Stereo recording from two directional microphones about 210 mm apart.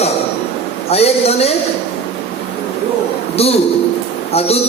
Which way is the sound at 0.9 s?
30° left (ahead or behind).